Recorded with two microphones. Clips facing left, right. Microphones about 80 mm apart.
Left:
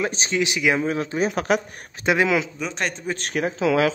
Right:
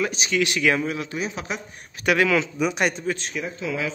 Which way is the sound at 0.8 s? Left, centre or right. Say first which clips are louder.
Left 5 dB; left.